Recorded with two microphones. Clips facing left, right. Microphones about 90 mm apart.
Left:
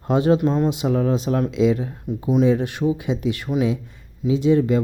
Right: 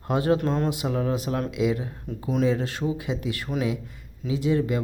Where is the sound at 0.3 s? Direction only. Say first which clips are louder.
Left 5 dB; 10° left (ahead or behind).